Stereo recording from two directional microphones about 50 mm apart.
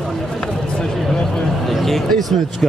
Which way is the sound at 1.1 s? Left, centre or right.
Centre.